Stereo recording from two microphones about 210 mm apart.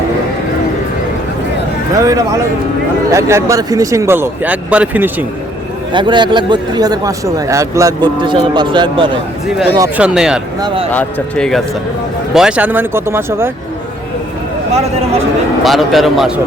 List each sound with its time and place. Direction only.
2.0 s speech: 15° right (ahead or behind)
5.9 s speech: 20° right (ahead or behind)
10.0 s speech: 5° right (ahead or behind)
15.6 s speech: centre (ahead or behind)